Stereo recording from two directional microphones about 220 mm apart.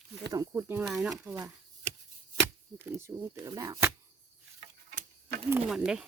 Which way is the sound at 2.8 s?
10° right (ahead or behind).